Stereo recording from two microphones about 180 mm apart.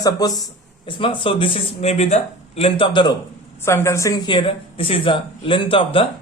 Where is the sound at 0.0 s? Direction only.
20° left (ahead or behind).